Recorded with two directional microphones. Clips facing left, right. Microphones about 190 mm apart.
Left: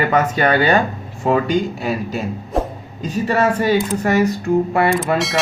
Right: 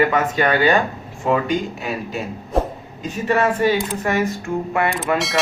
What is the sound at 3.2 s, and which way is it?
Speech, 40° left (ahead or behind).